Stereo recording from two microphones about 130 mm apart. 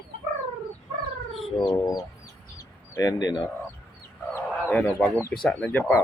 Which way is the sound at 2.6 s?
25° left (ahead or behind).